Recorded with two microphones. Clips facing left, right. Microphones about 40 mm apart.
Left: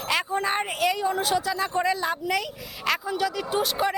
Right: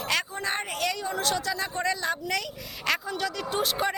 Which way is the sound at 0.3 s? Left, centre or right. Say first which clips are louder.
Left 5 dB; centre.